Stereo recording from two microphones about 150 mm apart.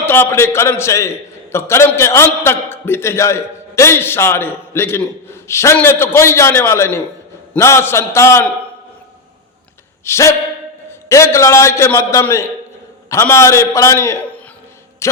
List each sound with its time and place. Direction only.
0.0 s a man's voice: 15° left (ahead or behind)
10.0 s a man's voice: 20° left (ahead or behind)
15.0 s a sound: 20° left (ahead or behind)